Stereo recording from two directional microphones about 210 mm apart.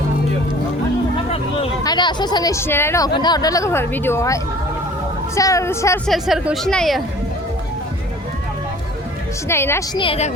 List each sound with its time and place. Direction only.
1.8 s speech: 20° left (ahead or behind)
6.1 s a woman's voice: centre (ahead or behind)
9.5 s speech: 10° left (ahead or behind)
10.0 s a woman's voice: 30° left (ahead or behind)